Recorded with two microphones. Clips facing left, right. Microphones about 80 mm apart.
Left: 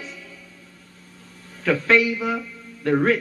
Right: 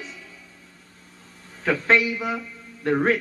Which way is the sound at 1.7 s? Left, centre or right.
Right.